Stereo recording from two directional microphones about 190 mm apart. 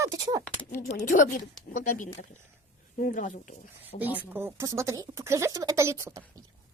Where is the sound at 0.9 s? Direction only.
45° left (ahead or behind).